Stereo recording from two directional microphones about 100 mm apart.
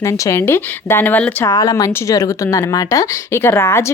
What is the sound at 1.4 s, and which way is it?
A woman's voice, 40° left (ahead or behind).